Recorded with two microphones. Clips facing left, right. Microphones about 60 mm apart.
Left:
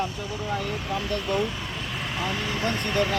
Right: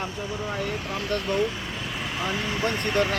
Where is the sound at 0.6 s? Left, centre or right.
Centre.